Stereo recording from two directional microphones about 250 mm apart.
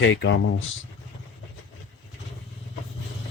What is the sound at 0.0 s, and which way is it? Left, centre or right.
Speech, left.